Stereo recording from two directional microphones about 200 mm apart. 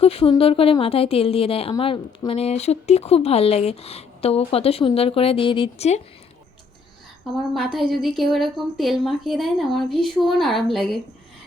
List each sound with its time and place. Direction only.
0.0 s speech: 30° left (ahead or behind)
7.5 s speech: centre (ahead or behind)